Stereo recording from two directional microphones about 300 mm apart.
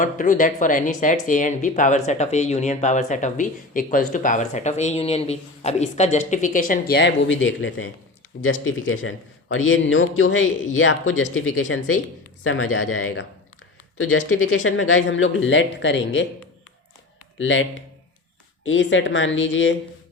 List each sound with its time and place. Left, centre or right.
0.0 s a man's voice: left
14.5 s a man's voice: left
17.3 s a man's voice: left